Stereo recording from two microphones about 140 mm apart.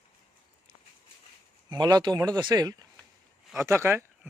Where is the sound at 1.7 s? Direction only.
30° right (ahead or behind).